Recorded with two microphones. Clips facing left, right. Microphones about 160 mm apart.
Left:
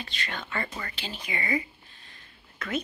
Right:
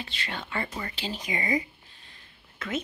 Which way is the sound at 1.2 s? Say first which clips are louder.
Right 1 dB; 20° right (ahead or behind).